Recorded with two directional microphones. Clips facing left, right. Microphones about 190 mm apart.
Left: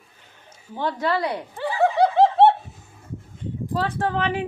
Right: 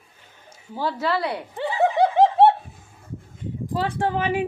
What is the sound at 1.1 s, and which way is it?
Speech, 20° left (ahead or behind).